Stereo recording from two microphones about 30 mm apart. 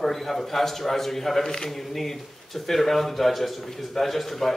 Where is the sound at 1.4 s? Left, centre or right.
Centre.